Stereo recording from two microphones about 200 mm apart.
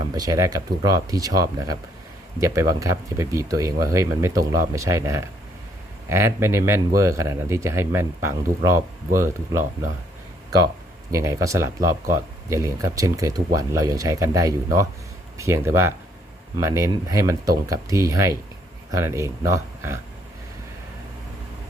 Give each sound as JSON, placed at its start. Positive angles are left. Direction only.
{"t": 0.0, "sound": "speech", "side_deg": -20}
{"t": 11.1, "sound": "speech", "side_deg": -15}